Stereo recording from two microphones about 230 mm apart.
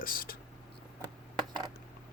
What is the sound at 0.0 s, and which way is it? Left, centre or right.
Whispering, left.